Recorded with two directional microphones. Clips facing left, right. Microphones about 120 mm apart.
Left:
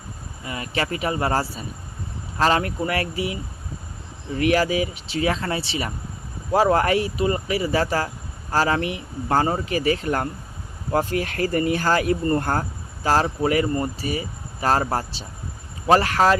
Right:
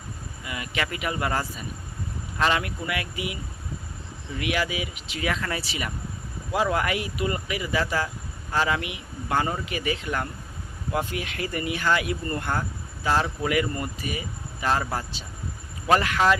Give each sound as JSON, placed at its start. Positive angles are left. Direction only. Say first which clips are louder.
{"t": 0.4, "sound": "speech", "louder": "left 4 dB", "side_deg": 35}
{"t": 4.4, "sound": "speech", "louder": "left 8 dB", "side_deg": 40}